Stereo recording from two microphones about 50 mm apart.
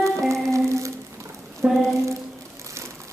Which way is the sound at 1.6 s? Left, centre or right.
Right.